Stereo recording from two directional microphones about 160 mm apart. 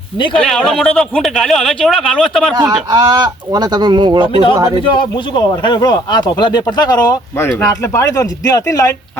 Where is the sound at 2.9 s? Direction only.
25° right (ahead or behind).